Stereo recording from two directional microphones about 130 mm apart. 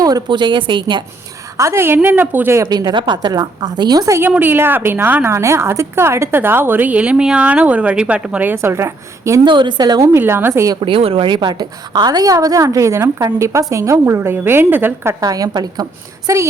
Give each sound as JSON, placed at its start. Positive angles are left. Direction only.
{"t": 0.0, "sound": "a woman's voice", "side_deg": -35}
{"t": 1.5, "sound": "a woman's voice", "side_deg": -20}
{"t": 2.6, "sound": "a woman's voice", "side_deg": -30}
{"t": 9.4, "sound": "a woman's voice", "side_deg": -35}
{"t": 10.1, "sound": "a woman's voice", "side_deg": -15}
{"t": 10.8, "sound": "a woman's voice", "side_deg": -40}
{"t": 15.2, "sound": "a woman's voice", "side_deg": -30}